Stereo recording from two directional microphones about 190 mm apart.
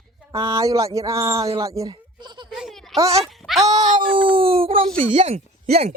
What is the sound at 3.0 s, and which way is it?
Speech, 35° right (ahead or behind).